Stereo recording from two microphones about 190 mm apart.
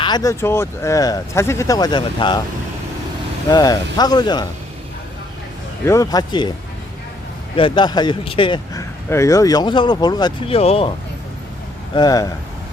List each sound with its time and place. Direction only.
0.0 s speech: 20° left (ahead or behind)
3.5 s speech: 20° left (ahead or behind)
5.8 s speech: 15° left (ahead or behind)
7.5 s speech: 25° left (ahead or behind)
11.9 s speech: 20° left (ahead or behind)